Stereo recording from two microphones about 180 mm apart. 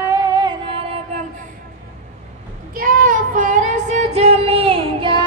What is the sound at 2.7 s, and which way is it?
Child singing, 50° right (ahead or behind).